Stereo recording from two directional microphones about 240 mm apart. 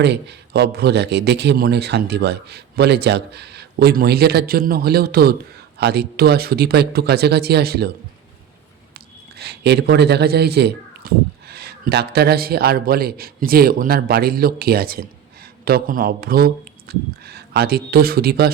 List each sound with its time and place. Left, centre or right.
0.0 s a man's voice: right
9.4 s a man's voice: right